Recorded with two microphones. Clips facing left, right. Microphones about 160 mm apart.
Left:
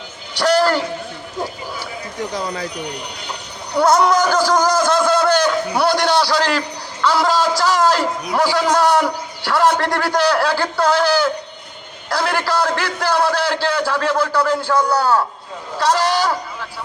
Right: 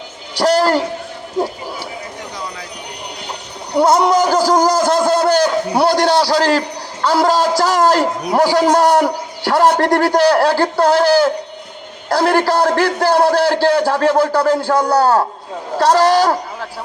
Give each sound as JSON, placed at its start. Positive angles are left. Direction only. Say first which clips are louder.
{"t": 0.3, "sound": "a man's voice", "louder": "right 2 dB", "side_deg": -35}
{"t": 3.8, "sound": "a man's voice", "louder": "right 2 dB", "side_deg": -25}